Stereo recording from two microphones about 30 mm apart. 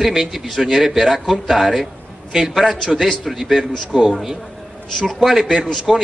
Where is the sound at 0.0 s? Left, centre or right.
Centre.